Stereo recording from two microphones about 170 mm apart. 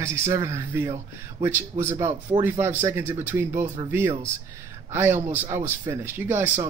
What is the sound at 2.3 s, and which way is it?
Speech, 30° right (ahead or behind).